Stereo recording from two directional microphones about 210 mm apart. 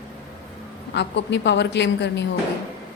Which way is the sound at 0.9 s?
55° left (ahead or behind).